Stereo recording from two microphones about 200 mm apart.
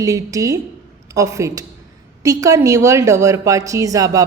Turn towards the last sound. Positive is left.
turn(degrees=-15)  # may be behind; listen again after turning